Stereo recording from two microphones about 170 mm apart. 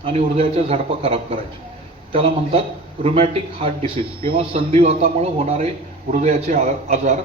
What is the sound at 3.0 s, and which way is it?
A man's voice, 35° right (ahead or behind).